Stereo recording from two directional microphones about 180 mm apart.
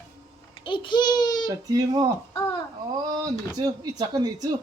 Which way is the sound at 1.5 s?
20° right (ahead or behind).